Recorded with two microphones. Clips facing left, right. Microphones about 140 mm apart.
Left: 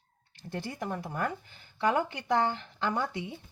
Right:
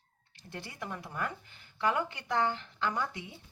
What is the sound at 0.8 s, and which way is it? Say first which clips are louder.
Speech: left 4 dB; 40° left (ahead or behind).